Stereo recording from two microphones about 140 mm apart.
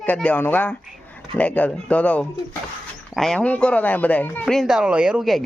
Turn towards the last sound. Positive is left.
turn(degrees=-5)  # may be behind; listen again after turning